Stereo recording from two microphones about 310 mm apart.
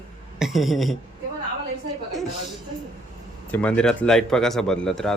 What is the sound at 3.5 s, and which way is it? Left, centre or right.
Speech, centre.